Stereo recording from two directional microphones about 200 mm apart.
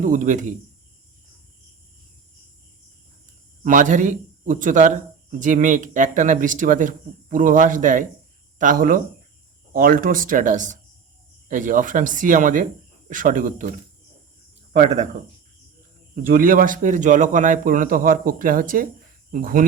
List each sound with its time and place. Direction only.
0.0 s speech: 40° right (ahead or behind)
3.6 s speech: 40° right (ahead or behind)
16.3 s speech: 45° right (ahead or behind)